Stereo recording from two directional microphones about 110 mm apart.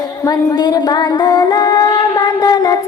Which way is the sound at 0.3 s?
35° left (ahead or behind).